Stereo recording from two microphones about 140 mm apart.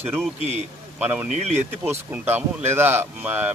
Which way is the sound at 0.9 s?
10° right (ahead or behind).